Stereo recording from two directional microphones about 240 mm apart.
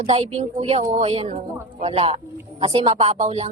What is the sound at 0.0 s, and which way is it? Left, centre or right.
Speech, right.